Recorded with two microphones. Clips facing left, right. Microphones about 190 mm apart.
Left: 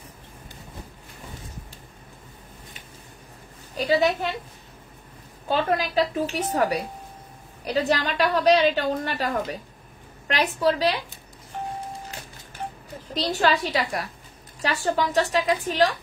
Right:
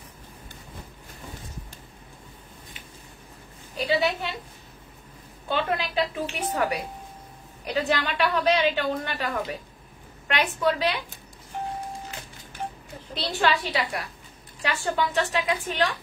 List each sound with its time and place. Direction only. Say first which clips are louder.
3.7 s a woman's voice: left 3 dB; 40° left (ahead or behind)
5.5 s a woman's voice: left 3 dB; 40° left (ahead or behind)
13.1 s a woman's voice: left 2 dB; 40° left (ahead or behind)